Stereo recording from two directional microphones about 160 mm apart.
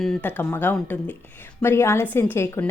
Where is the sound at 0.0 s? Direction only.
Centre (ahead or behind).